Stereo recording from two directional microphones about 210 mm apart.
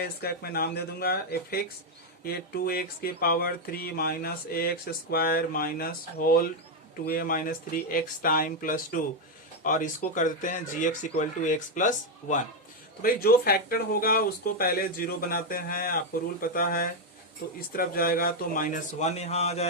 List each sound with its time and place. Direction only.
0.0 s speech: 50° left (ahead or behind); by 19.6 s 30° left (ahead or behind)